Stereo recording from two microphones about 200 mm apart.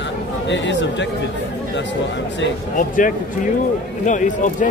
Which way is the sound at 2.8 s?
40° left (ahead or behind).